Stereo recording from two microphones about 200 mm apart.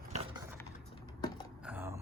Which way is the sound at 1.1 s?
20° left (ahead or behind).